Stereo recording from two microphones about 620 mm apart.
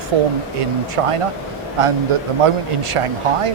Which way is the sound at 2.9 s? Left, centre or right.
Right.